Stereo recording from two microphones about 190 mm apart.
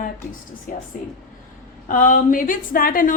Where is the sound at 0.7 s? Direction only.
45° left (ahead or behind).